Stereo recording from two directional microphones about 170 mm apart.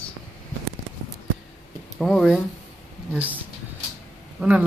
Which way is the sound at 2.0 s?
Centre (ahead or behind).